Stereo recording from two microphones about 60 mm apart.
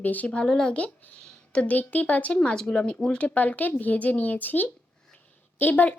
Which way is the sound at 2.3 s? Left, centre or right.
Centre.